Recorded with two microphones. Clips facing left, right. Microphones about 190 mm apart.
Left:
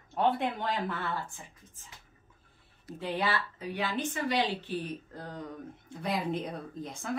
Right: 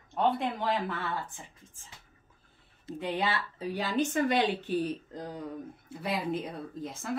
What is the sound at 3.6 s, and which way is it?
Speech, 35° right (ahead or behind).